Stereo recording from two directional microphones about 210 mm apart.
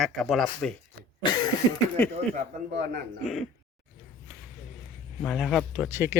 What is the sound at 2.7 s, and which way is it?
Speech, 55° right (ahead or behind).